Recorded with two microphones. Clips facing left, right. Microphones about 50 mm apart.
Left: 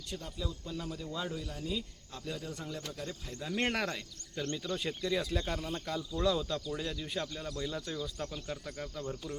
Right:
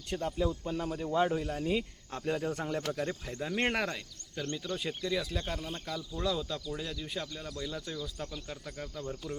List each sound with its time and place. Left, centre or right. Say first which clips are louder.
0.1 s speech: right 9 dB; right
3.2 s speech: right 3 dB; right
3.6 s speech: right 1 dB; centre